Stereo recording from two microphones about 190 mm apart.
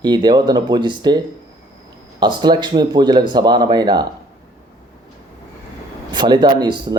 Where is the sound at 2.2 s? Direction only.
25° right (ahead or behind).